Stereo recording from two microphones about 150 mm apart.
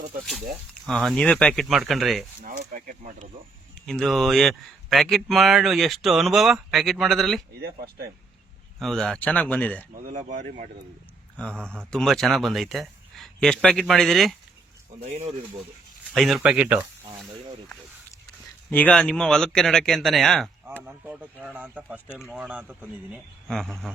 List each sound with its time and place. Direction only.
0.7 s speech: 5° left (ahead or behind)
2.4 s speech: 65° right (ahead or behind)
3.8 s speech: 5° left (ahead or behind)
8.8 s speech: centre (ahead or behind)
9.9 s speech: 65° right (ahead or behind)
11.3 s speech: 5° left (ahead or behind)
15.1 s speech: 50° right (ahead or behind)
16.1 s speech: centre (ahead or behind)
18.7 s speech: 10° left (ahead or behind)
20.8 s speech: 10° right (ahead or behind)
23.5 s speech: centre (ahead or behind)